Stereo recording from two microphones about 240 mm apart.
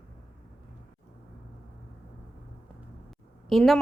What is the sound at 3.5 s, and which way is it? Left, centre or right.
Speech, centre.